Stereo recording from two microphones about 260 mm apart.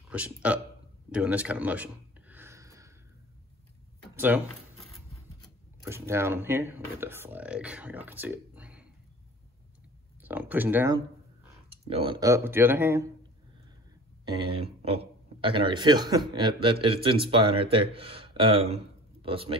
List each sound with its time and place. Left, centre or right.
0.1 s a man's voice: centre
1.1 s a sound: centre
4.1 s a sound: centre
5.9 s speech: centre
10.2 s speech: centre
11.7 s speech: right
14.2 s speech: centre